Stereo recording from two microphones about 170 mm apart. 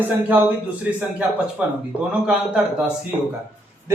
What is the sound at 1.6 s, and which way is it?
Speech, 10° right (ahead or behind).